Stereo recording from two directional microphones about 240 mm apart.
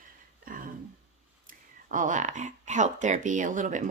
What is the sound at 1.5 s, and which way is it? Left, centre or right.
Speech, right.